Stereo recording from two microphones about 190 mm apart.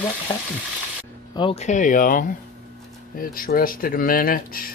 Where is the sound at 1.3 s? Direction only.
30° left (ahead or behind); by 4.7 s 50° left (ahead or behind).